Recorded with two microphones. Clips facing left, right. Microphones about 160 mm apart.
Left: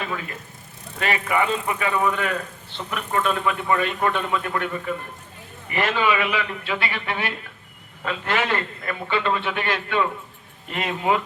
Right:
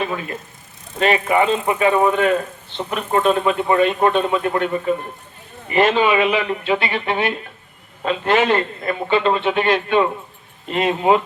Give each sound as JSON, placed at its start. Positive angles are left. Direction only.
{"t": 0.0, "sound": "a man's voice", "side_deg": -25}